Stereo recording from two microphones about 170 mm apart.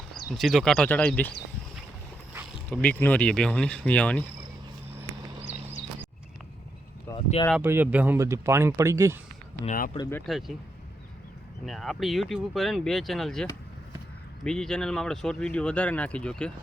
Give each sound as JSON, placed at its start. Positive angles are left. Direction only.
{"t": 0.3, "sound": "speech", "side_deg": 0}
{"t": 2.8, "sound": "speech", "side_deg": 10}
{"t": 7.1, "sound": "a sound", "side_deg": 15}
{"t": 7.5, "sound": "speech", "side_deg": -10}
{"t": 9.6, "sound": "speech", "side_deg": 55}
{"t": 10.2, "sound": "speech", "side_deg": 0}
{"t": 11.6, "sound": "speech", "side_deg": 0}